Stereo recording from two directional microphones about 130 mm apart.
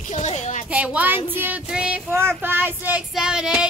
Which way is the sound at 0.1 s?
65° left (ahead or behind).